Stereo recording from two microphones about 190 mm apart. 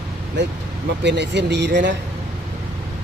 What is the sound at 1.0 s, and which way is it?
Speech, 65° right (ahead or behind).